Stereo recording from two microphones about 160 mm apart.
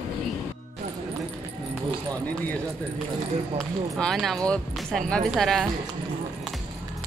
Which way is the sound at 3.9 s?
Centre (ahead or behind).